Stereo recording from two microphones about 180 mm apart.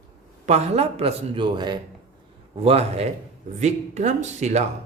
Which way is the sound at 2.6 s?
35° right (ahead or behind).